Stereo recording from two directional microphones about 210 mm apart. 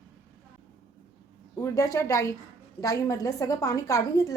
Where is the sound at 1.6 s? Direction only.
15° left (ahead or behind).